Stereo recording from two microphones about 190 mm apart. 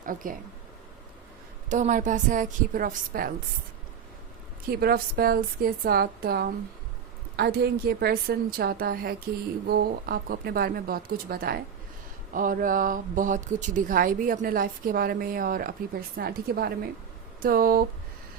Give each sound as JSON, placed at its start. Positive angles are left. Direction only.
{"t": 0.0, "sound": "speech", "side_deg": -45}
{"t": 1.7, "sound": "speech", "side_deg": -40}
{"t": 4.7, "sound": "speech", "side_deg": -55}